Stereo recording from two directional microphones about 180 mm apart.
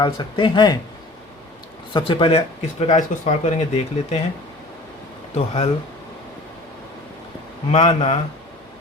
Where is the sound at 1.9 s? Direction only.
25° left (ahead or behind).